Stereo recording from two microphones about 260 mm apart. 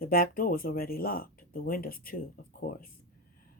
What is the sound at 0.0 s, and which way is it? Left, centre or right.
Speech, left.